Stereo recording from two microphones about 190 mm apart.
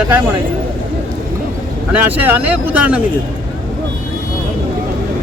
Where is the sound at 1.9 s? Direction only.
10° right (ahead or behind).